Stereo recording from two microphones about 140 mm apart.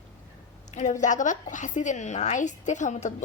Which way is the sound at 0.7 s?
55° left (ahead or behind).